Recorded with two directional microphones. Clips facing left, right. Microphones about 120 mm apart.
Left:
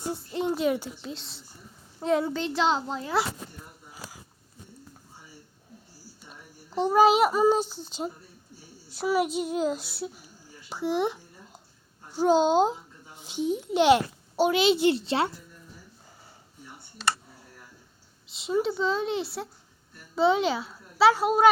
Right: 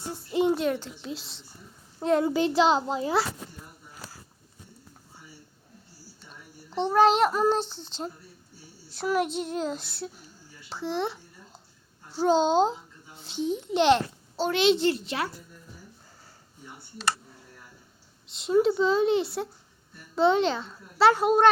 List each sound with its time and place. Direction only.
0.3 s a child's voice: 5° right (ahead or behind)
6.2 s a child's voice: 5° left (ahead or behind)
10.7 s a sound: 10° left (ahead or behind)
12.1 s a woman's voice: 10° left (ahead or behind)
14.9 s speech: 30° left (ahead or behind)
18.3 s a child's voice: centre (ahead or behind)